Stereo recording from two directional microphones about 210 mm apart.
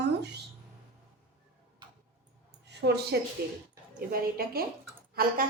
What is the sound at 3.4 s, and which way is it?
A woman's voice, 50° right (ahead or behind).